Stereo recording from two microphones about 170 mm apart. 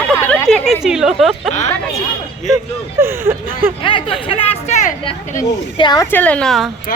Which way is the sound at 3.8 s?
30° left (ahead or behind).